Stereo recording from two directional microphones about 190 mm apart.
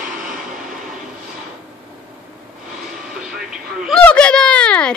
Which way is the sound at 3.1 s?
5° right (ahead or behind).